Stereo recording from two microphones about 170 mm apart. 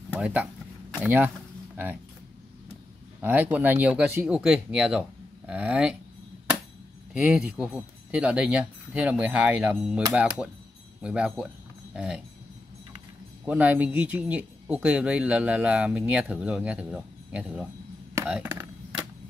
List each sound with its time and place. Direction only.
0.1 s speech: 5° right (ahead or behind)
3.2 s speech: 10° right (ahead or behind)
7.2 s speech: 5° right (ahead or behind)
11.9 s a sound: 5° right (ahead or behind)
13.5 s speech: 10° right (ahead or behind)